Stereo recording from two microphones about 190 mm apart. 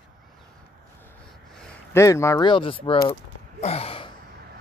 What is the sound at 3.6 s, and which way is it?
Sigh, 30° left (ahead or behind).